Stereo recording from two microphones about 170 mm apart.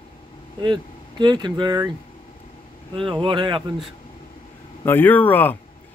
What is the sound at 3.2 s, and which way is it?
Speech, 30° right (ahead or behind).